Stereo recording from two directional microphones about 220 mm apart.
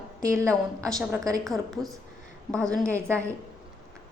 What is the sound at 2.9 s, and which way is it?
Speech, 10° right (ahead or behind).